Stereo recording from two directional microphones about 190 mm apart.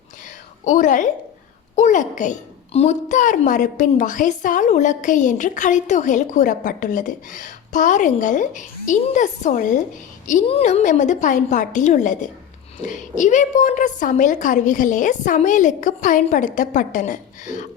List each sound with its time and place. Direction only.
0.6 s a woman's voice: 40° left (ahead or behind)